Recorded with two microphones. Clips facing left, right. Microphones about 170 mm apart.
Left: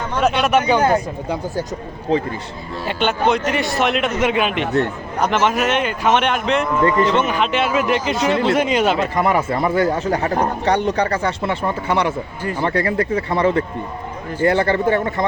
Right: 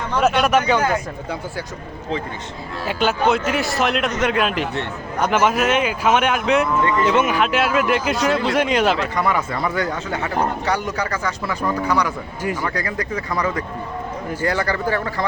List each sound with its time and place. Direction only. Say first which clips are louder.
0.2 s a man's voice: even; centre (ahead or behind)
0.7 s speech: left 3 dB; 30° left (ahead or behind)
2.8 s a man's voice: even; 5° right (ahead or behind)
9.1 s speech: left 3 dB; 30° left (ahead or behind)